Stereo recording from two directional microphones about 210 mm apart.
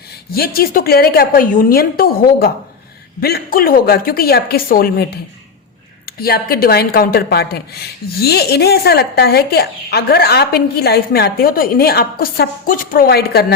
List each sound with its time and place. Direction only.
0.3 s speech: 45° left (ahead or behind)